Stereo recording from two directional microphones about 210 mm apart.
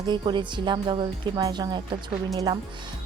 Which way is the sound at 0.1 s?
20° right (ahead or behind).